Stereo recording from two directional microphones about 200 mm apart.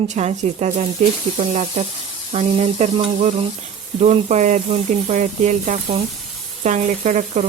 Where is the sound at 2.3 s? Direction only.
35° right (ahead or behind).